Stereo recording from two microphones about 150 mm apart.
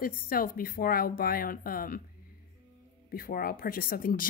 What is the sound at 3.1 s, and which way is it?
Speech, 75° left (ahead or behind).